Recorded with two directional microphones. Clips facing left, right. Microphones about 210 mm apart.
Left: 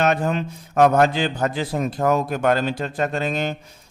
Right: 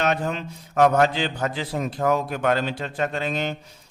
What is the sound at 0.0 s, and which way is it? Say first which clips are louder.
A man's voice: left 4 dB; 50° left (ahead or behind).